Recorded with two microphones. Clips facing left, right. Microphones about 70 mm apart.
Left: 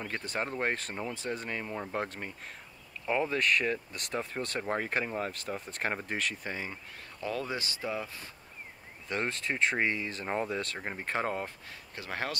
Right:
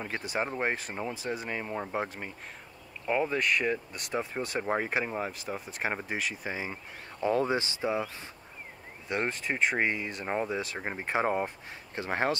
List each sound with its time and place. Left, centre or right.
0.1 s speech: centre
9.1 s speech: centre; by 12.4 s right